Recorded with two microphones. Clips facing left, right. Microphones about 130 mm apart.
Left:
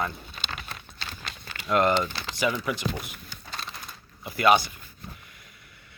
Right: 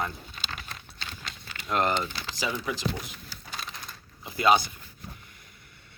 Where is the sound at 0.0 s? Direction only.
65° left (ahead or behind).